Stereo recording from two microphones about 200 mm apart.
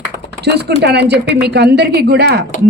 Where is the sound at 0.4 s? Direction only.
55° right (ahead or behind).